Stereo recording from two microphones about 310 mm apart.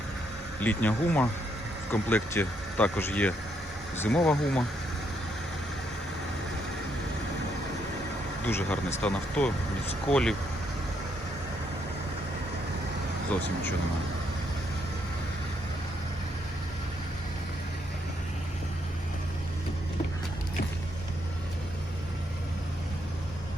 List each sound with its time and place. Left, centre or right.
0.6 s speech: centre
8.4 s speech: centre
13.3 s speech: centre